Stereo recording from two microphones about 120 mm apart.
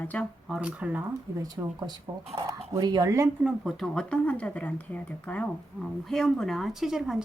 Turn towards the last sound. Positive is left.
turn(degrees=-5)  # may be behind; listen again after turning